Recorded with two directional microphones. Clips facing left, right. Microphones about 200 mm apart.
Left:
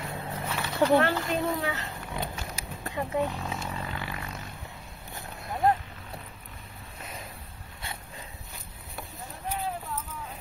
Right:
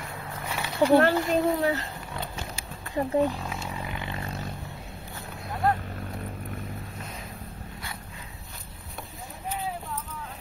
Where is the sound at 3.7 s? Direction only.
15° right (ahead or behind).